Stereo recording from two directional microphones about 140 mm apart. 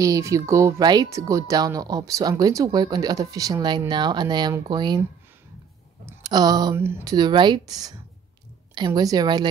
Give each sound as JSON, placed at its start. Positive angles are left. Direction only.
{"t": 0.0, "sound": "speech", "side_deg": -25}
{"t": 6.2, "sound": "speech", "side_deg": -30}
{"t": 6.8, "sound": "speech", "side_deg": -15}
{"t": 7.2, "sound": "speech", "side_deg": -30}